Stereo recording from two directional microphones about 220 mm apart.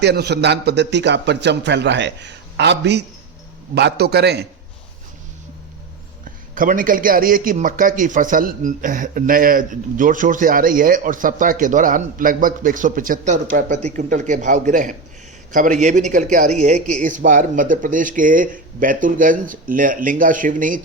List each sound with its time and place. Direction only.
0.0 s a man's voice: 50° right (ahead or behind)
6.5 s a man's voice: 40° right (ahead or behind)